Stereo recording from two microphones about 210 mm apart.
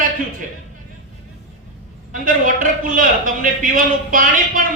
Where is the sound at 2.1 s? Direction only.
40° right (ahead or behind).